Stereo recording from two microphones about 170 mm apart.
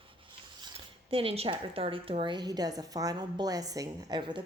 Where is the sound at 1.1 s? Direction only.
35° right (ahead or behind).